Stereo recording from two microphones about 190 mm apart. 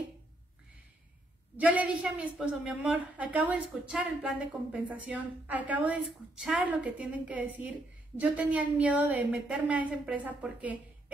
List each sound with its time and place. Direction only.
1.6 s a woman's voice: 10° right (ahead or behind)